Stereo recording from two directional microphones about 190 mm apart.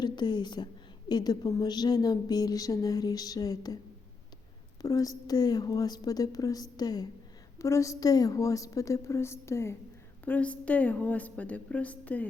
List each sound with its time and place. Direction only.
0.0 s a woman's voice: 20° left (ahead or behind)
4.8 s a woman's voice: 15° left (ahead or behind)